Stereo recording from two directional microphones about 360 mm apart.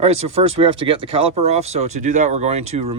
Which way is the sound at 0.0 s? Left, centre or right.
Centre.